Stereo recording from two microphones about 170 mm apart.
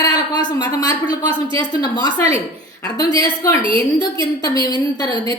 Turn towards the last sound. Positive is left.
turn(degrees=25)  # may be behind; listen again after turning